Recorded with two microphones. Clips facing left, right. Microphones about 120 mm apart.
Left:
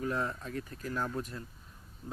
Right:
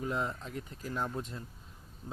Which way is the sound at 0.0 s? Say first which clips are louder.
Left 1 dB; 20° right (ahead or behind).